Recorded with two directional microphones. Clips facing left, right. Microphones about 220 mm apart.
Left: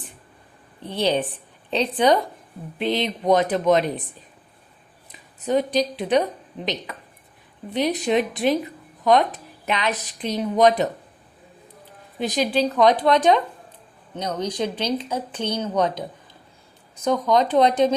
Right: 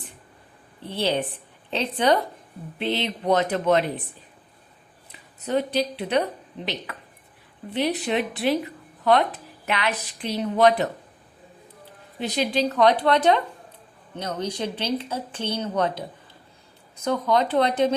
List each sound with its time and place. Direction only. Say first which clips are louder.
0.9 s speech: left 3 dB; 15° left (ahead or behind)
5.5 s speech: left 3 dB; 15° left (ahead or behind)
7.7 s speech: left 3 dB; 20° left (ahead or behind)
9.6 s speech: left 2 dB; 20° left (ahead or behind)
12.5 s speech: left 1 dB; 10° left (ahead or behind)